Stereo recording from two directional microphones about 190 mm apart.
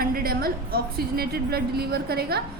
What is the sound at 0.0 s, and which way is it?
A woman's voice, 50° right (ahead or behind).